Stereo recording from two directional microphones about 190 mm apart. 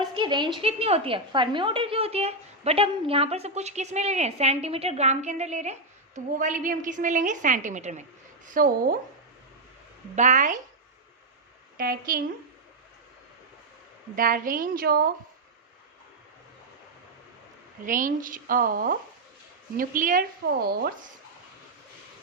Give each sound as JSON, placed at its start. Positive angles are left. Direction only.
{"t": 0.0, "sound": "a woman's voice", "side_deg": -25}
{"t": 10.2, "sound": "a woman's voice", "side_deg": -40}
{"t": 11.8, "sound": "a woman's voice", "side_deg": -50}
{"t": 14.2, "sound": "a woman's voice", "side_deg": -45}
{"t": 17.8, "sound": "a woman's voice", "side_deg": -45}